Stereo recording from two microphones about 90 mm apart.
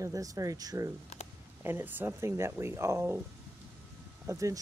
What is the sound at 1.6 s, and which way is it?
Speech, 25° right (ahead or behind).